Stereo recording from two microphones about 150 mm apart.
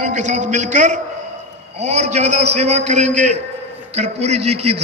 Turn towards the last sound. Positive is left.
turn(degrees=-45)  # may be behind; listen again after turning